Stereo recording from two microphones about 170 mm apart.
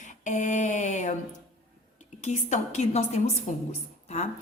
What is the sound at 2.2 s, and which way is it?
A woman's voice, 40° left (ahead or behind).